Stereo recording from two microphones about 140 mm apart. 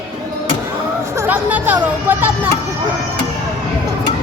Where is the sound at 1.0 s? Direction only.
20° right (ahead or behind).